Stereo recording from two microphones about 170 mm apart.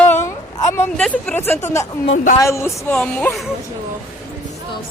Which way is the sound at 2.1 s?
50° left (ahead or behind).